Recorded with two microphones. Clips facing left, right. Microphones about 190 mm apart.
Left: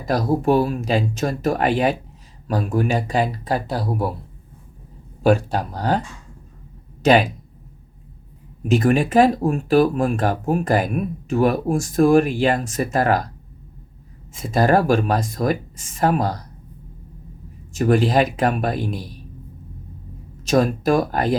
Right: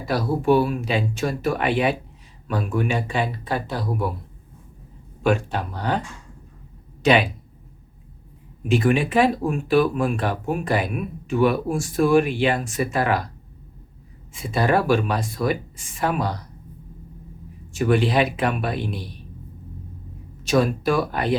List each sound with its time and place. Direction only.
0.0 s speech: 45° left (ahead or behind)
5.2 s speech: 35° left (ahead or behind)
7.0 s speech: 40° left (ahead or behind)
8.6 s speech: 40° left (ahead or behind)
14.3 s speech: 40° left (ahead or behind)
17.7 s speech: 40° left (ahead or behind)
20.4 s speech: 40° left (ahead or behind)